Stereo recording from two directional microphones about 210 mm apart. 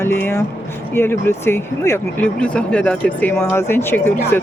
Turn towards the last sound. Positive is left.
turn(degrees=10)  # may be behind; listen again after turning